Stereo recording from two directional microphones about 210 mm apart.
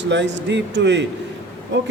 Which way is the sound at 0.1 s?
55° right (ahead or behind).